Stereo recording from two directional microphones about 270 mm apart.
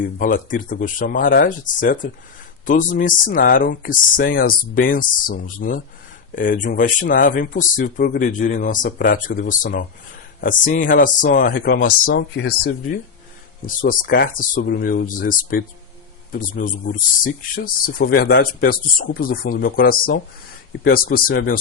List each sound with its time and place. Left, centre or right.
0.0 s speech: left